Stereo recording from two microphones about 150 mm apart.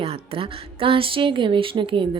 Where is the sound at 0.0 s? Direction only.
40° right (ahead or behind).